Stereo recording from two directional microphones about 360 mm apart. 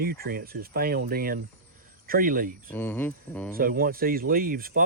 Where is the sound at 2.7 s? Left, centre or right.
Centre.